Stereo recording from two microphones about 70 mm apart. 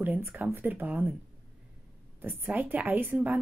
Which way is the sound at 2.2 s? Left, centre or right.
Right.